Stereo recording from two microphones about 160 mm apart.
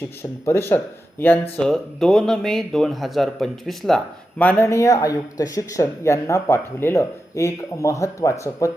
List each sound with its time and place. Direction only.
0.2 s speech: 15° left (ahead or behind)